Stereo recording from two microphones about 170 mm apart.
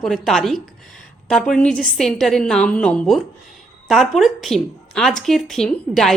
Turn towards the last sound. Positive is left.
turn(degrees=5)  # may be behind; listen again after turning